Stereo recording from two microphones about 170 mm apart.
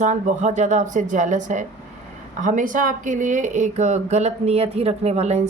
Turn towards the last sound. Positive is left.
turn(degrees=-40)  # may be behind; listen again after turning